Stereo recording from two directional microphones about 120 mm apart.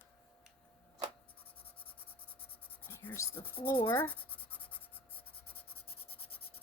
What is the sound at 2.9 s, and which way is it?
Speech, 20° left (ahead or behind).